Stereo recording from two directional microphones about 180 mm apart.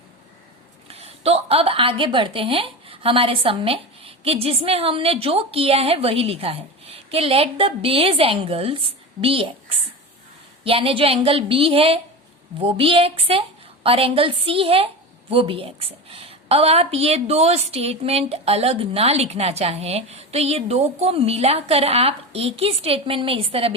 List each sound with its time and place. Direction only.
0.9 s a woman's voice: 35° right (ahead or behind)